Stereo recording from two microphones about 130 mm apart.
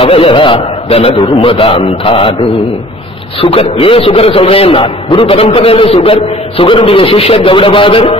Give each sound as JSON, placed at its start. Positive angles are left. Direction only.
{"t": 0.0, "sound": "a man's voice", "side_deg": 45}
{"t": 3.3, "sound": "a man's voice", "side_deg": 45}